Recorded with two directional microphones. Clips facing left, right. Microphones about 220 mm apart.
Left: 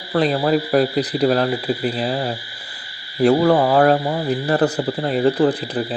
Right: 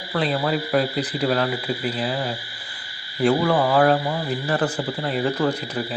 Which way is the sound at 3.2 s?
40° left (ahead or behind).